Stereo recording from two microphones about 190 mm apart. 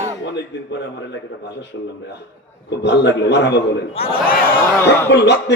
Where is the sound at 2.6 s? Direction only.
65° left (ahead or behind).